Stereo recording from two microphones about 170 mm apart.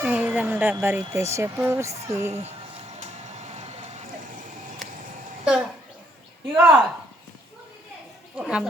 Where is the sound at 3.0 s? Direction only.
40° right (ahead or behind).